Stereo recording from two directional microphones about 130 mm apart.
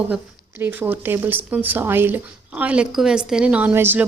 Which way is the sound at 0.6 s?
15° right (ahead or behind).